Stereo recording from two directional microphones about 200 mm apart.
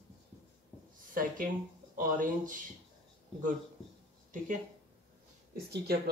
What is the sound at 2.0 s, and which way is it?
Speech, 40° right (ahead or behind).